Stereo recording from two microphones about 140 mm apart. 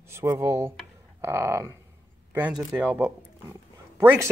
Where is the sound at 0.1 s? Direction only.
20° right (ahead or behind).